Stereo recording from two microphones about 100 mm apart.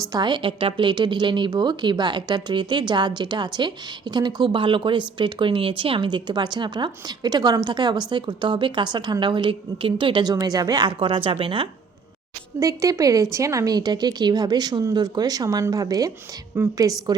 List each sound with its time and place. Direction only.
0.1 s speech: 50° right (ahead or behind)
12.5 s a woman's voice: 35° right (ahead or behind)